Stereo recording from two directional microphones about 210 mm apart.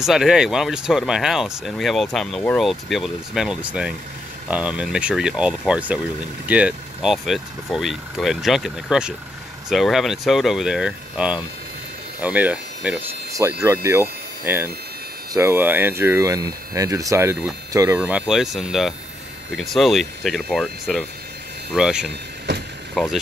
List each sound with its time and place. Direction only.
0.0 s speech: centre (ahead or behind)